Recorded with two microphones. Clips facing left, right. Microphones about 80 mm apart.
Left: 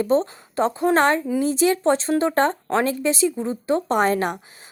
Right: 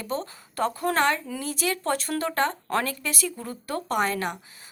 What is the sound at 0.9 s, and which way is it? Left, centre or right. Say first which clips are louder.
A woman's voice: left 7 dB; left.